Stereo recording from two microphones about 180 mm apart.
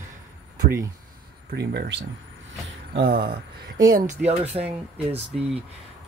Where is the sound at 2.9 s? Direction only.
60° right (ahead or behind).